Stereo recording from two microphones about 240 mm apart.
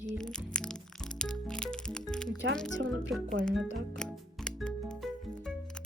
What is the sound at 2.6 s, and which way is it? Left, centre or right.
Speech, centre.